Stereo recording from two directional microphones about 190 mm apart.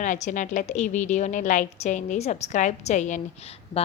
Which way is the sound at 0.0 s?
40° left (ahead or behind).